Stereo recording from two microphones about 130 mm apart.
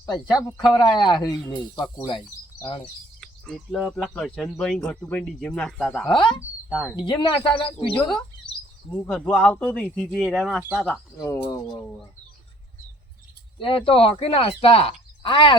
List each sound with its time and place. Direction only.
0.7 s speech: 35° left (ahead or behind)
2.8 s speech: centre (ahead or behind)
6.1 s speech: 40° left (ahead or behind)
6.7 s speech: 5° right (ahead or behind)
6.9 s speech: 35° left (ahead or behind)
7.9 s speech: 5° left (ahead or behind)
11.2 s speech: 25° left (ahead or behind)
13.6 s speech: 40° left (ahead or behind)